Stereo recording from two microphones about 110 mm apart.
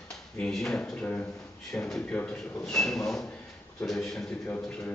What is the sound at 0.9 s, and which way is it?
A man's voice, 15° left (ahead or behind).